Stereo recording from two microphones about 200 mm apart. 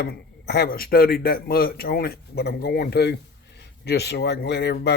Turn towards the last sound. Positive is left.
turn(degrees=55)  # may be behind; listen again after turning